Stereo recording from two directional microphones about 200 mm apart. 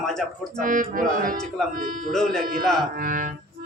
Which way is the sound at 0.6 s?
45° right (ahead or behind).